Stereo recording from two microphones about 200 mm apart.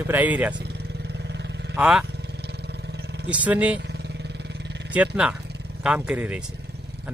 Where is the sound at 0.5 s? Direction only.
55° right (ahead or behind).